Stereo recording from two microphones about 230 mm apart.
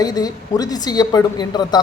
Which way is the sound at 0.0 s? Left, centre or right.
Centre.